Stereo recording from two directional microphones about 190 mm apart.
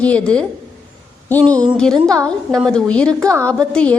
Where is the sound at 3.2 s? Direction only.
15° right (ahead or behind).